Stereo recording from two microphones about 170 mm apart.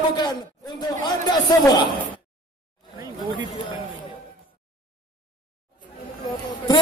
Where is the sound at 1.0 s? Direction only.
25° left (ahead or behind).